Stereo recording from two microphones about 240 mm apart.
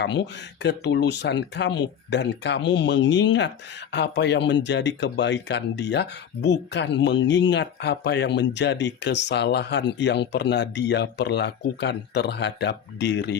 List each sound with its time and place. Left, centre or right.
0.6 s speech: left